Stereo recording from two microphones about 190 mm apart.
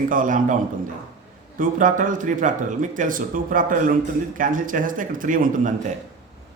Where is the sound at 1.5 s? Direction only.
45° right (ahead or behind).